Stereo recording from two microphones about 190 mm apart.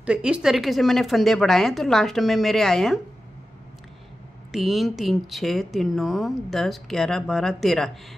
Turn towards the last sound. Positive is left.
turn(degrees=0)  # may be behind; listen again after turning